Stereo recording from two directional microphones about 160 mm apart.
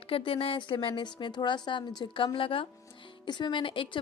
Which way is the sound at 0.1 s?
35° left (ahead or behind).